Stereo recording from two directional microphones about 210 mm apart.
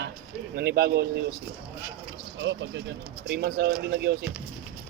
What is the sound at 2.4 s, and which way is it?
Speech, 60° right (ahead or behind).